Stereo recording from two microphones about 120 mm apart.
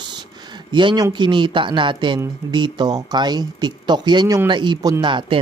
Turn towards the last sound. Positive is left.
turn(degrees=-40)  # may be behind; listen again after turning